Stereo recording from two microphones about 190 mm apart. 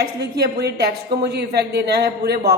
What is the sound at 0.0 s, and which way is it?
A woman's voice, 60° right (ahead or behind).